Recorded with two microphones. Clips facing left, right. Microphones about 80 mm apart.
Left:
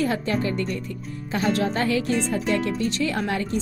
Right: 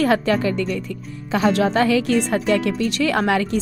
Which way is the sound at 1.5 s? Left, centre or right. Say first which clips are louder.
Right 5 dB; right.